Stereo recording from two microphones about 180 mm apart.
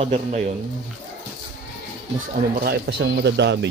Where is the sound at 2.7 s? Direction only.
65° right (ahead or behind).